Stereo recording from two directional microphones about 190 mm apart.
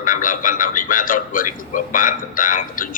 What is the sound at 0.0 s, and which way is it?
A man's voice, 45° left (ahead or behind).